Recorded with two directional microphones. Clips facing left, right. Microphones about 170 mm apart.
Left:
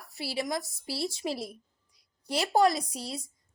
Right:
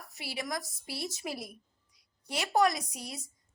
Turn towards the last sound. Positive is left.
turn(degrees=30)  # may be behind; listen again after turning